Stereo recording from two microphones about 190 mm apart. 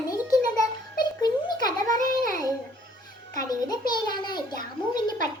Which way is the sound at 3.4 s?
20° left (ahead or behind).